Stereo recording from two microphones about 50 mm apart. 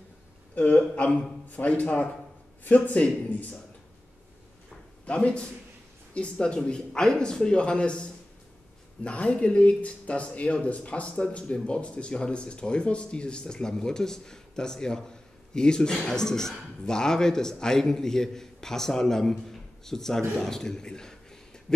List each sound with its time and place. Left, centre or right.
0.6 s a man's voice: left
5.0 s a man's voice: left